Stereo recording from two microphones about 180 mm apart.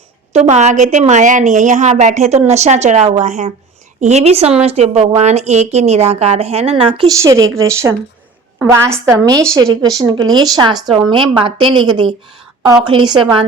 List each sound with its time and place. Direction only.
0.3 s a woman's voice: 40° right (ahead or behind)
7.5 s a woman's voice: 15° right (ahead or behind)